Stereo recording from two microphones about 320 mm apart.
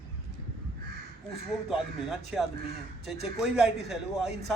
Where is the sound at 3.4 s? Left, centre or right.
Centre.